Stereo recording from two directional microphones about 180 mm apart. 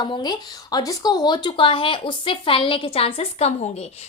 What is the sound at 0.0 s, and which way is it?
Speech, 25° left (ahead or behind).